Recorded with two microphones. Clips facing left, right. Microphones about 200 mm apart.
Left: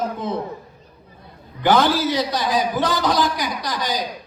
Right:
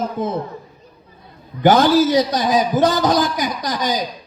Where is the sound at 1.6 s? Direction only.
45° right (ahead or behind).